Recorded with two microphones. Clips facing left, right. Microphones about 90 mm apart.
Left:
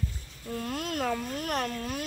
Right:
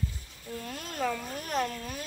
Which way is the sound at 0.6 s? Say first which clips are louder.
Left 3 dB; 60° left (ahead or behind).